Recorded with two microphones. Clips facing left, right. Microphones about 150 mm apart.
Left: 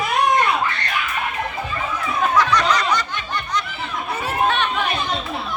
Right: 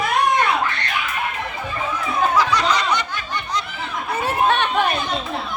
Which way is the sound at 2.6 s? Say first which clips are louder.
Left 1 dB; 30° right (ahead or behind).